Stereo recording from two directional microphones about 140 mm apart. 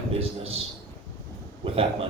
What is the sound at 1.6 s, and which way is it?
Speech, 40° right (ahead or behind).